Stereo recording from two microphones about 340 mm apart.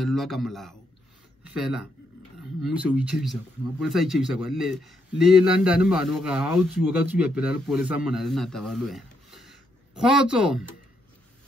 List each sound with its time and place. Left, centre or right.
0.0 s a man's voice: centre